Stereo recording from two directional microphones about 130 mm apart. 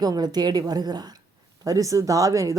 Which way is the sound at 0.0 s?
30° right (ahead or behind).